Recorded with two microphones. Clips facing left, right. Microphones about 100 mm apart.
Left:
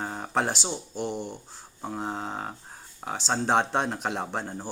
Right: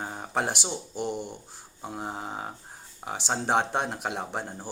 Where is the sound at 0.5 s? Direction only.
15° right (ahead or behind).